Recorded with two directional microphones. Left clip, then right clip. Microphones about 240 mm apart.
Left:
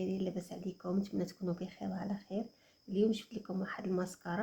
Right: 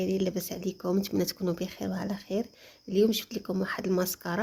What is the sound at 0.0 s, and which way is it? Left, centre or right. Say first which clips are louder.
Speech: right 9 dB; right.